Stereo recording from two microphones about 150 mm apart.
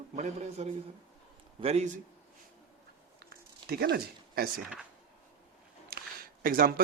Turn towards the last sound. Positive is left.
turn(degrees=-70)  # may be behind; listen again after turning